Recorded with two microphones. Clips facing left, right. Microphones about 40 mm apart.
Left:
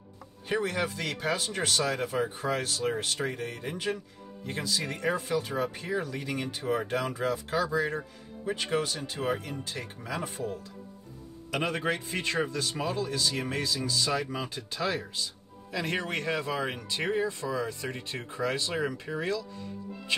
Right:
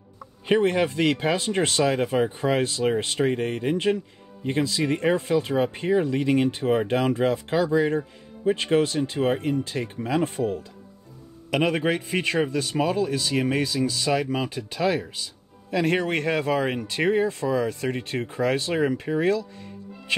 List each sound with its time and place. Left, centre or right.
0.5 s speech: right
11.7 s speech: right